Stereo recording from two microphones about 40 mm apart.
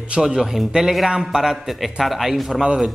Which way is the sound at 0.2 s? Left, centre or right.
Centre.